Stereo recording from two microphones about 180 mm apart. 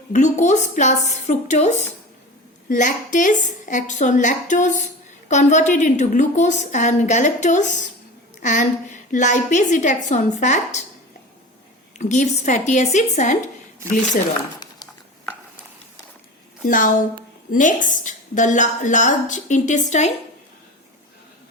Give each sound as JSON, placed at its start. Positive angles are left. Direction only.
{"t": 0.1, "sound": "a woman's voice", "side_deg": 40}
{"t": 11.9, "sound": "a woman's voice", "side_deg": 40}
{"t": 16.6, "sound": "a woman's voice", "side_deg": 50}